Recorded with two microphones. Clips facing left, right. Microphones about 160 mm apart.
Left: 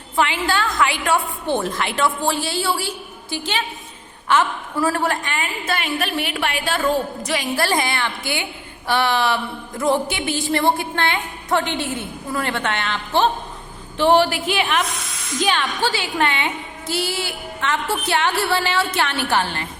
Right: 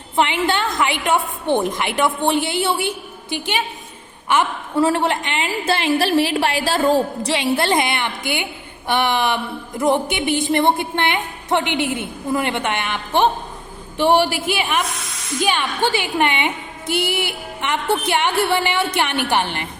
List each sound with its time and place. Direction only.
0.4 s a woman's voice: 20° right (ahead or behind)
4.7 s a woman's voice: 25° right (ahead or behind)
15.4 s a woman's voice: 15° right (ahead or behind)